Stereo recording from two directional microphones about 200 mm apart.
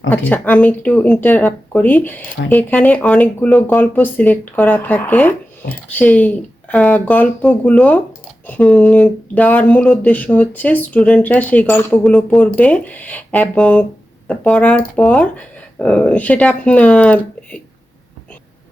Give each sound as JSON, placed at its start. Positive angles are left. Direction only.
{"t": 0.1, "sound": "speech", "side_deg": 10}